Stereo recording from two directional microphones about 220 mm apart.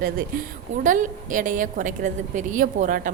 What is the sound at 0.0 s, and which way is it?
A woman's voice, 40° right (ahead or behind).